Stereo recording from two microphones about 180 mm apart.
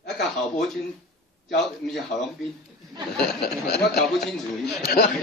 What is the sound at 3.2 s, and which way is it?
Speech, 65° left (ahead or behind).